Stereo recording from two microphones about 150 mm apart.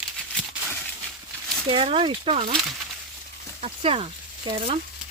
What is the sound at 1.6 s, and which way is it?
Speech, 35° right (ahead or behind).